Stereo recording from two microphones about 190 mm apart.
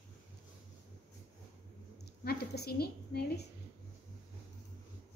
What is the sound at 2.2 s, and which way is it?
A woman's voice, 55° left (ahead or behind).